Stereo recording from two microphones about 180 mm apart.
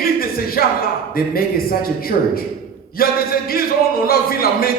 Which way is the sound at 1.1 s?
55° left (ahead or behind).